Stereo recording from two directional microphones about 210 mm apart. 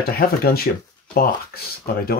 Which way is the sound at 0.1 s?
45° left (ahead or behind).